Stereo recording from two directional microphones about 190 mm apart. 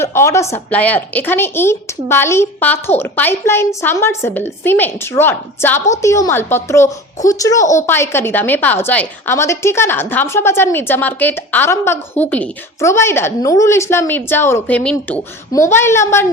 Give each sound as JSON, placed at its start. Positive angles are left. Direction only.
{"t": 0.0, "sound": "a woman's voice", "side_deg": 15}